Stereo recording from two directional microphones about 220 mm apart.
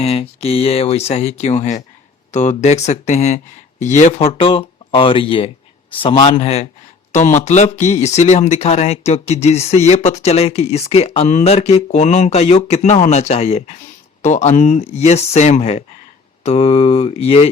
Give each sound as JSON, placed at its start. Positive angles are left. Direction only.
{"t": 0.0, "sound": "speech", "side_deg": 25}